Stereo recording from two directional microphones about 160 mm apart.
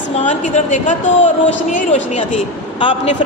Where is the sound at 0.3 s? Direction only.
50° left (ahead or behind).